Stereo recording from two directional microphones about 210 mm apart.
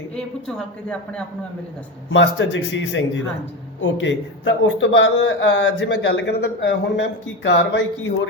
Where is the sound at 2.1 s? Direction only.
60° left (ahead or behind).